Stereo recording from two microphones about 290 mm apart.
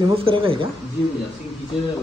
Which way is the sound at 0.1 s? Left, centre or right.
Centre.